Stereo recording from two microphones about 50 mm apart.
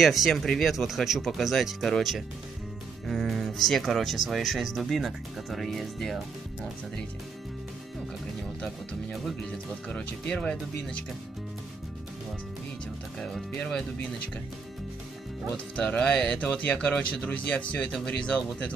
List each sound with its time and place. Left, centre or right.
0.0 s speech: centre
9.8 s speech: centre
13.2 s speech: centre
15.5 s speech: left